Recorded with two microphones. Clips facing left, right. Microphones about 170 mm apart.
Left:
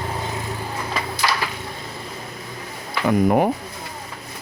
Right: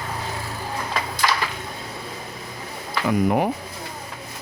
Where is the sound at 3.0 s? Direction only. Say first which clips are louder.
Left 3 dB; 50° left (ahead or behind).